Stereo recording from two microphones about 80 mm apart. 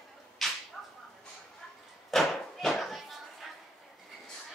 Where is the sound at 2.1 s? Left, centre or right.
Centre.